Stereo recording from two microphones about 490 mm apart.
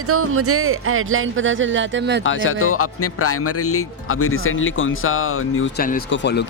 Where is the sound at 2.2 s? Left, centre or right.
Left.